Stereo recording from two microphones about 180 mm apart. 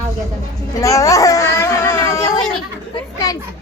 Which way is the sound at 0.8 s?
15° left (ahead or behind).